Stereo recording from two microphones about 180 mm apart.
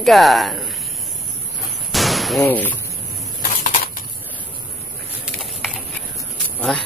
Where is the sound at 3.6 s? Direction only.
50° left (ahead or behind).